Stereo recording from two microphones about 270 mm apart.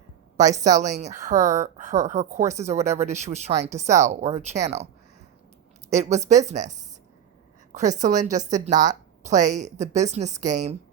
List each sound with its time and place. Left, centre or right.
0.3 s a woman's voice: centre
0.6 s speech: right
5.9 s speech: right